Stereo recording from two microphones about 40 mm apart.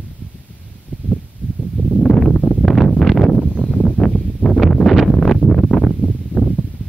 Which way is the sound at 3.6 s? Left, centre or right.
Left.